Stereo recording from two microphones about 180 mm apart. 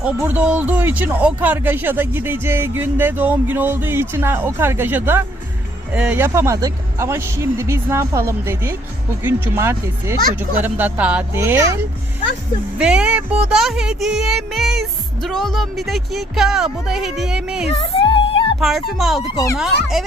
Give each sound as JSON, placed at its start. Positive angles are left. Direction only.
{"t": 0.0, "sound": "speech", "side_deg": -5}
{"t": 12.8, "sound": "speech", "side_deg": -5}
{"t": 17.7, "sound": "music", "side_deg": 30}
{"t": 18.6, "sound": "speech", "side_deg": 0}